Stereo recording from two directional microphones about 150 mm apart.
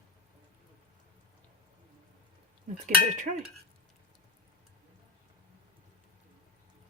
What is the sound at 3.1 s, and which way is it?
Speech, 55° right (ahead or behind).